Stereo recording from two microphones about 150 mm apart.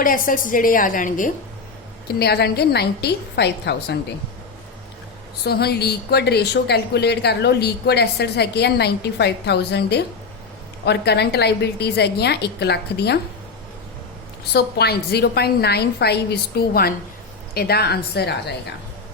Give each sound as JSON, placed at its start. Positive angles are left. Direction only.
{"t": 0.0, "sound": "a woman's voice", "side_deg": 65}
{"t": 2.0, "sound": "a woman's voice", "side_deg": 90}
{"t": 5.5, "sound": "a woman's voice", "side_deg": 90}
{"t": 11.0, "sound": "a woman's voice", "side_deg": 90}
{"t": 14.5, "sound": "a woman's voice", "side_deg": 90}